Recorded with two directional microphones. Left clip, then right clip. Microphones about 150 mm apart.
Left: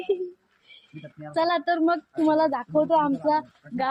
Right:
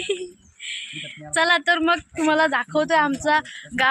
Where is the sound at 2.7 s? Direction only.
50° right (ahead or behind).